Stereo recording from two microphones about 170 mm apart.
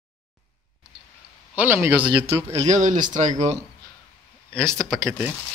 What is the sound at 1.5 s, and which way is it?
Speech, 10° right (ahead or behind).